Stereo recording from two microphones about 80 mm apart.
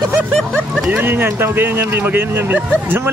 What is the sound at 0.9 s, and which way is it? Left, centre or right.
Speech, right.